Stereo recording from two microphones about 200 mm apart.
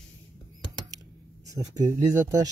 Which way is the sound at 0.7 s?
20° right (ahead or behind).